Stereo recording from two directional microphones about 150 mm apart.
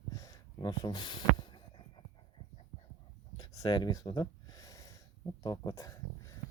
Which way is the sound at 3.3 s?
25° left (ahead or behind).